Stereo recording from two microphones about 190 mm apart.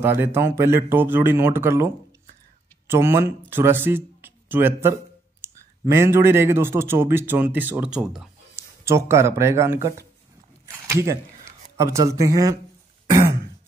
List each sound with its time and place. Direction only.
0.0 s speech: 10° right (ahead or behind)
2.9 s speech: 15° right (ahead or behind)
8.8 s speech: 15° right (ahead or behind)